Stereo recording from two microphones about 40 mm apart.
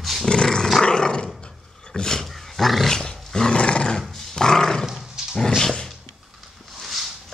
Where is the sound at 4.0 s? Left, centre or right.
Centre.